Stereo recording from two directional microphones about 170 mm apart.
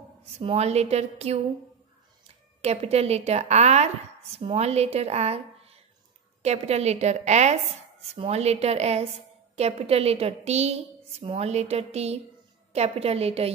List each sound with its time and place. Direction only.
0.4 s a woman's voice: 35° right (ahead or behind)
2.6 s a woman's voice: 40° right (ahead or behind)